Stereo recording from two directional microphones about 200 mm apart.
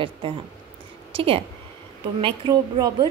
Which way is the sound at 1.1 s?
25° right (ahead or behind).